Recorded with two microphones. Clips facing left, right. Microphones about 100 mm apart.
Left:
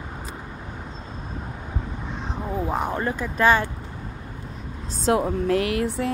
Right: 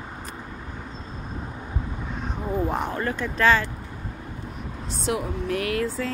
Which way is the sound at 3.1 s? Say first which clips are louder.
Left 1 dB; 10° left (ahead or behind).